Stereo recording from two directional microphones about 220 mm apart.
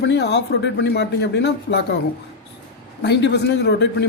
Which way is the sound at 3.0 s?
50° left (ahead or behind).